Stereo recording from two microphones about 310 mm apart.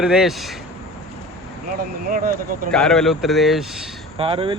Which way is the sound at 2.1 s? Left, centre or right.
Right.